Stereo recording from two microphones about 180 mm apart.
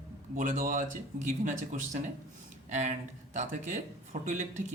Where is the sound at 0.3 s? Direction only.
50° right (ahead or behind).